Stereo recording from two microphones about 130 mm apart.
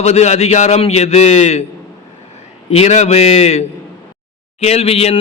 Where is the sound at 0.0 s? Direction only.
60° left (ahead or behind).